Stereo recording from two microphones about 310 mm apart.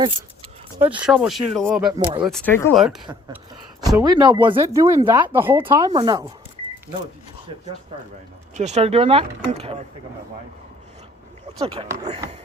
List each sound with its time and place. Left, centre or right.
0.8 s speech: centre
1.0 s speech: centre
1.9 s speech: centre
2.2 s speech: centre
3.8 s speech: centre
8.5 s speech: right
11.6 s speech: centre